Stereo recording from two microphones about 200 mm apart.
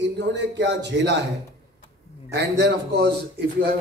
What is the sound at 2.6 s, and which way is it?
Speech, 55° right (ahead or behind).